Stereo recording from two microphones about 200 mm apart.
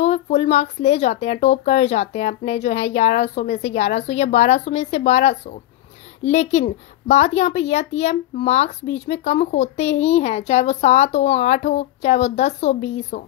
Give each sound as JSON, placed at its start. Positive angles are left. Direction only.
{"t": 0.0, "sound": "speech", "side_deg": 35}